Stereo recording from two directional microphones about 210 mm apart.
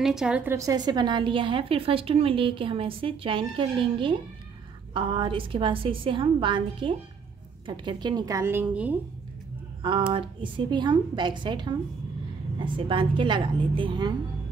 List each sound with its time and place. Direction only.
0.0 s a woman's voice: 5° right (ahead or behind)
9.8 s a woman's voice: 25° right (ahead or behind)